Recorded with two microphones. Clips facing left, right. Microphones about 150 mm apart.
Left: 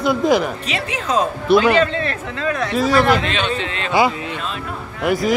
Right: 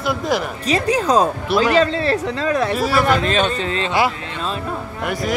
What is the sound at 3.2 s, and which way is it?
Speech, 40° right (ahead or behind).